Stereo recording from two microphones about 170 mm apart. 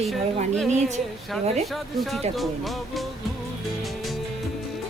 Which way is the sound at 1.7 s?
Centre (ahead or behind).